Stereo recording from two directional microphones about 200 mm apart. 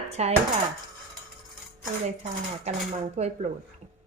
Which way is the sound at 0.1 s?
30° right (ahead or behind).